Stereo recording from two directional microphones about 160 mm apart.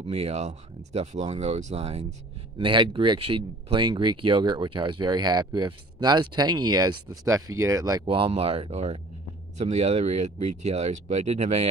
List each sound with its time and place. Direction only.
0.0 s speech: 40° right (ahead or behind); by 8.0 s 20° right (ahead or behind)
8.1 s speech: 35° right (ahead or behind)